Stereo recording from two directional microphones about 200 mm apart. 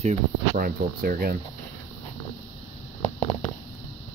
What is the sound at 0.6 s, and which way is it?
Speech, 45° right (ahead or behind).